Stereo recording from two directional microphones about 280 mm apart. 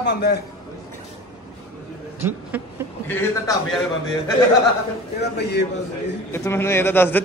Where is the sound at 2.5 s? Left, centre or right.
Centre.